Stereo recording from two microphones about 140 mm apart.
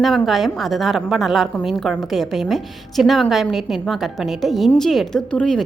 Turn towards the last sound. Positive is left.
turn(degrees=5)  # may be behind; listen again after turning